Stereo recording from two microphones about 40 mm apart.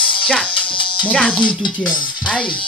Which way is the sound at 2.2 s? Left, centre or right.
Left.